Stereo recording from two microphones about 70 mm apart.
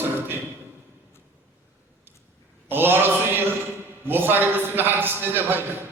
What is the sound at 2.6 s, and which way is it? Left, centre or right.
Mantra, right.